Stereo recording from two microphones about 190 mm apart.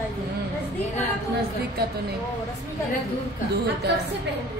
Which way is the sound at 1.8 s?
55° right (ahead or behind).